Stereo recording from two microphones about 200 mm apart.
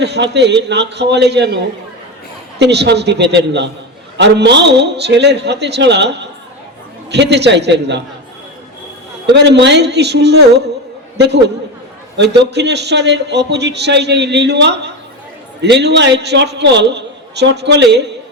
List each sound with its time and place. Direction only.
0.0 s speech: 55° right (ahead or behind)
9.3 s speech: 60° right (ahead or behind)